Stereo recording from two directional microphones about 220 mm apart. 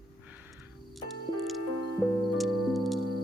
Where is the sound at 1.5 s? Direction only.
Centre (ahead or behind).